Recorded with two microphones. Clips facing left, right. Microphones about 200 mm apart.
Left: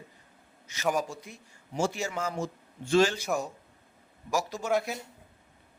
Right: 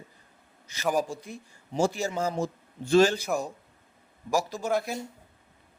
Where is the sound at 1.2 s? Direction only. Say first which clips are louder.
Right 6 dB; 35° right (ahead or behind).